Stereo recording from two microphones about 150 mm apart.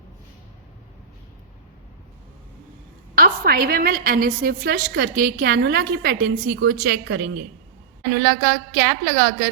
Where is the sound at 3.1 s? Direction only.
80° right.